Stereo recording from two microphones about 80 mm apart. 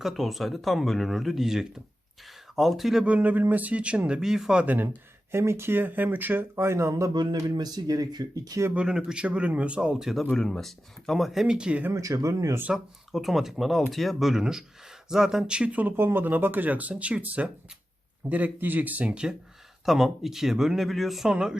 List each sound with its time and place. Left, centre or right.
0.0 s speech: centre
3.1 s speech: centre
4.6 s speech: right
5.3 s speech: right
6.6 s speech: right
7.1 s speech: right
8.7 s speech: centre
10.3 s speech: centre
11.9 s speech: right
12.7 s speech: centre
16.0 s speech: right; by 21.6 s centre